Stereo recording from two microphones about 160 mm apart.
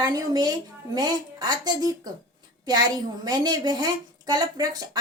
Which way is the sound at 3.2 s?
25° right (ahead or behind).